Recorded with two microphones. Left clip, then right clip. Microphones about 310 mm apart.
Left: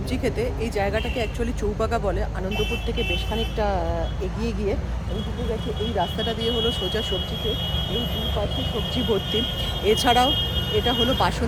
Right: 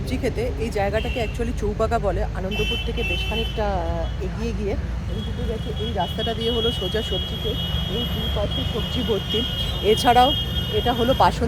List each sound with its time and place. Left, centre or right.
0.1 s speech: centre
6.0 s speech: centre
9.8 s speech: centre